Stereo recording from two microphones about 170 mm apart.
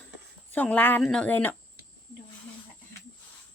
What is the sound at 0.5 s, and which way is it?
Speech, 10° left (ahead or behind).